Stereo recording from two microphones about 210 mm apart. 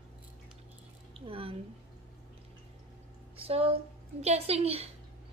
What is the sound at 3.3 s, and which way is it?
Speech, 25° right (ahead or behind).